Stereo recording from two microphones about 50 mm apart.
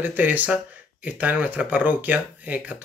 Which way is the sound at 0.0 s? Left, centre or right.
Right.